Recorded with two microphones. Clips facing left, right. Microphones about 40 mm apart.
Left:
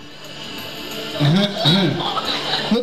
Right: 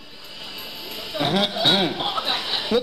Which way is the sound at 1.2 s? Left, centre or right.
Centre.